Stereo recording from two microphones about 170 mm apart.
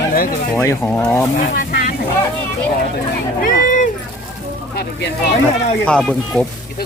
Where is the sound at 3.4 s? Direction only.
50° left (ahead or behind).